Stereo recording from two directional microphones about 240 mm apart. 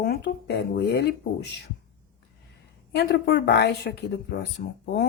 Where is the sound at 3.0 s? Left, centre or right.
Left.